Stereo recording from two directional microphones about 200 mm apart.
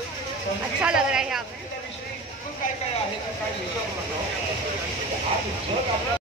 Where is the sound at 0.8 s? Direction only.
5° right (ahead or behind).